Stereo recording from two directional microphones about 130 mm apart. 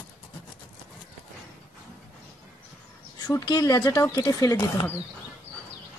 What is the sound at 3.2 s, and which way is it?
A woman's voice, 25° left (ahead or behind).